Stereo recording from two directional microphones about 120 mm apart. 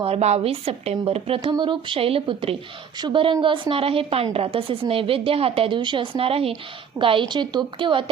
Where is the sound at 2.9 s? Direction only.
40° right (ahead or behind).